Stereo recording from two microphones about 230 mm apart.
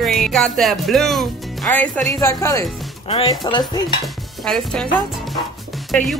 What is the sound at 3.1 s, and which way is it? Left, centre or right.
Speech, left.